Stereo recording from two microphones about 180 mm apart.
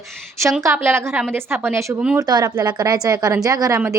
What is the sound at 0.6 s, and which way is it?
A woman's voice, 15° right (ahead or behind).